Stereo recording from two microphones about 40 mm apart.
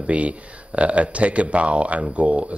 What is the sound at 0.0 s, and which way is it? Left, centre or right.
Speech, right.